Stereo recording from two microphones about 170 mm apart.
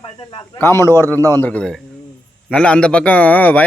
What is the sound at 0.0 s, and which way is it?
Speech, 30° left (ahead or behind).